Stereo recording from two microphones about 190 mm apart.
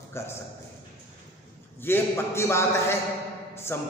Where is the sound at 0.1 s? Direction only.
15° left (ahead or behind).